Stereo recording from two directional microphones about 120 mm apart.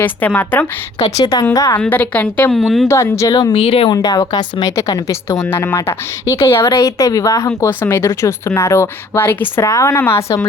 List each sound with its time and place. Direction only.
0.0 s a woman's voice: 15° left (ahead or behind)
1.2 s speech: 35° left (ahead or behind)
1.8 s a woman's voice: 10° left (ahead or behind)
2.5 s speech: centre (ahead or behind)
2.8 s speech: 25° left (ahead or behind)
3.5 s speech: 55° left (ahead or behind)
3.8 s speech: 30° left (ahead or behind)
4.7 s speech: 25° left (ahead or behind)